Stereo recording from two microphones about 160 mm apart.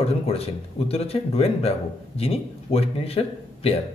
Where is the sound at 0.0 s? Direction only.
40° left (ahead or behind).